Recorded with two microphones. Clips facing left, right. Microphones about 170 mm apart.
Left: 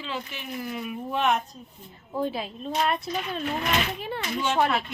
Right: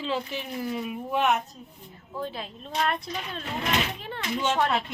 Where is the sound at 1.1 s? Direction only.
5° right (ahead or behind).